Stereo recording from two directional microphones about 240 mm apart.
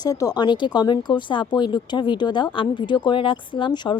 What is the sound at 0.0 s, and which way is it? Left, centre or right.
Speech, centre.